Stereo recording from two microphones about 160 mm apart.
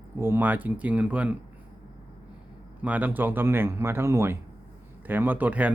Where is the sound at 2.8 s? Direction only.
10° right (ahead or behind).